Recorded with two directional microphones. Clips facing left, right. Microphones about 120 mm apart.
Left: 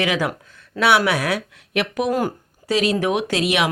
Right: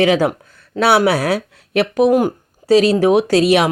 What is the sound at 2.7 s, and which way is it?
Speech, 35° right (ahead or behind).